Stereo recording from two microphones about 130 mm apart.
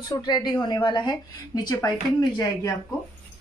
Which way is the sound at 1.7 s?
25° left (ahead or behind).